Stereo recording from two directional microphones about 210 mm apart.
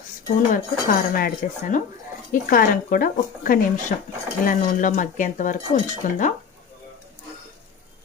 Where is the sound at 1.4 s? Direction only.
40° left (ahead or behind).